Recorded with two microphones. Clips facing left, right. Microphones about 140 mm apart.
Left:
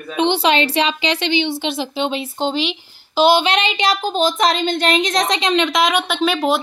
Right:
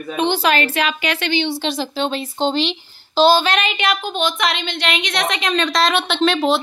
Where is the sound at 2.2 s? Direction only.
5° left (ahead or behind); by 5.6 s 30° left (ahead or behind).